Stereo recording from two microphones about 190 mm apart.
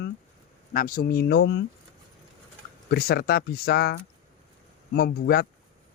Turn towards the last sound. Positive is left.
turn(degrees=55)  # may be behind; listen again after turning